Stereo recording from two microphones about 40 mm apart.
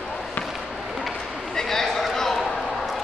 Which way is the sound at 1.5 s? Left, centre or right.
Centre.